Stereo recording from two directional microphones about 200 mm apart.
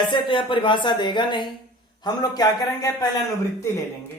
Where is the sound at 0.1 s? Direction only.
25° left (ahead or behind).